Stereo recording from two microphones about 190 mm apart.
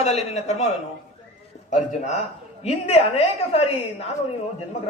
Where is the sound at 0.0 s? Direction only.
35° left (ahead or behind).